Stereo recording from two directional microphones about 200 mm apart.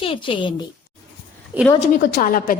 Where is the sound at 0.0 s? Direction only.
25° left (ahead or behind).